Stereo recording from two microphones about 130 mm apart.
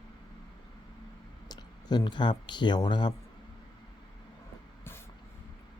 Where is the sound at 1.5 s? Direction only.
35° left (ahead or behind).